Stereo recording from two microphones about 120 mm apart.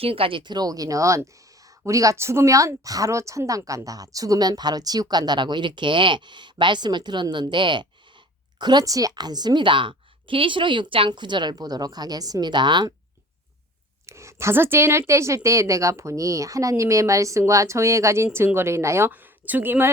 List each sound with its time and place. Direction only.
0.0 s speech: 50° right (ahead or behind)
14.1 s speech: 25° right (ahead or behind)